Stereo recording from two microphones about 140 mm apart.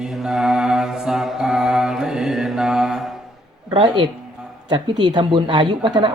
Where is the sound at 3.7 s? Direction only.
40° right (ahead or behind).